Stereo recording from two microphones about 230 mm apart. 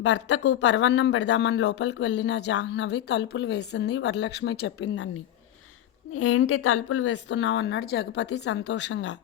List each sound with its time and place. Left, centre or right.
0.0 s speech: left
4.9 s speech: left